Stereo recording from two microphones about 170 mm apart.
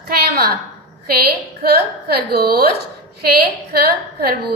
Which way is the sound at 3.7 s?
65° right (ahead or behind).